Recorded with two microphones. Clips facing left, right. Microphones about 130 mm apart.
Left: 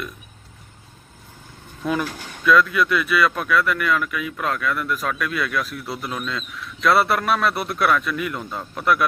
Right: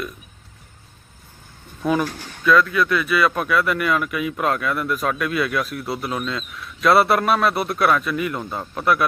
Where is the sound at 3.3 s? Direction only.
10° right (ahead or behind).